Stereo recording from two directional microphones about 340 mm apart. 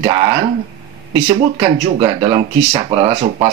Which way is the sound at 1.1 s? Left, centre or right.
Centre.